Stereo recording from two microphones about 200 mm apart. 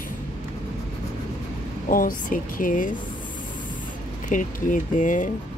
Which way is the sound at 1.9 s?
45° left (ahead or behind).